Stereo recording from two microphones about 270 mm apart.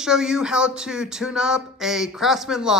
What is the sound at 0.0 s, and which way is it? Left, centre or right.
Speech, centre.